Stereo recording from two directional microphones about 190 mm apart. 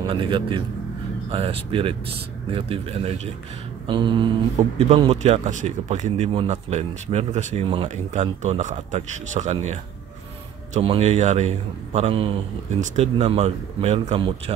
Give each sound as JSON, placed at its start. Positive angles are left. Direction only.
{"t": 0.0, "sound": "a man's voice", "side_deg": -25}
{"t": 4.6, "sound": "speech", "side_deg": -35}